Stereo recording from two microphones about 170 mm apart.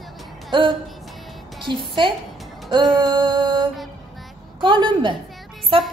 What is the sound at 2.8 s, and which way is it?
Music, centre (ahead or behind).